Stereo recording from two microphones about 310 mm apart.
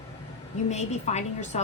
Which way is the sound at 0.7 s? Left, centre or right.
Left.